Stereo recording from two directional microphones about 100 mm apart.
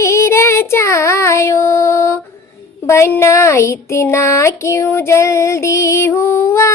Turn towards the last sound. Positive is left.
turn(degrees=25)  # may be behind; listen again after turning